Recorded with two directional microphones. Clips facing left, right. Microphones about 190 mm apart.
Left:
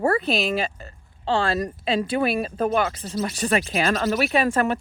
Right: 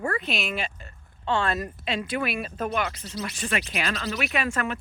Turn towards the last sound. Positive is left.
turn(degrees=35)  # may be behind; listen again after turning